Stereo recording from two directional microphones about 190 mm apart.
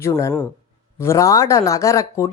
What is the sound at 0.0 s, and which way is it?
Speech, 15° left (ahead or behind).